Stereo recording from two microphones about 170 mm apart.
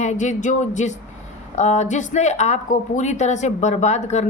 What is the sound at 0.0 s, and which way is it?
A woman's voice, 45° left (ahead or behind).